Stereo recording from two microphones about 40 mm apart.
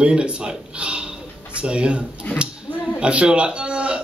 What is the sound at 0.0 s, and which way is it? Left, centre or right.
A man's voice, right.